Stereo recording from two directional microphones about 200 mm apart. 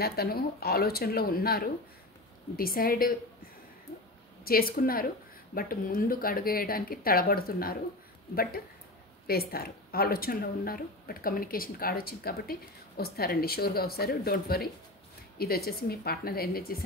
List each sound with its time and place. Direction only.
0.0 s speech: 50° left (ahead or behind)
4.5 s speech: 45° left (ahead or behind)